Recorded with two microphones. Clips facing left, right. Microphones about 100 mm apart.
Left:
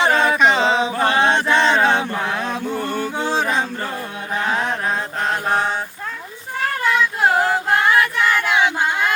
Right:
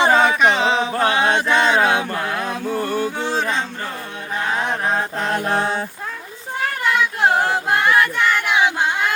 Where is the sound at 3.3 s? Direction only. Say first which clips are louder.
Left 2 dB; 5° left (ahead or behind).